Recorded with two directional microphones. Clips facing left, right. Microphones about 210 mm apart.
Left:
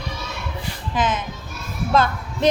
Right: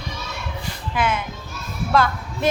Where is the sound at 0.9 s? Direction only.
20° left (ahead or behind).